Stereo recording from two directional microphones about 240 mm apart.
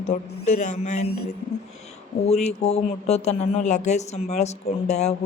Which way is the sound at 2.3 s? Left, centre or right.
Left.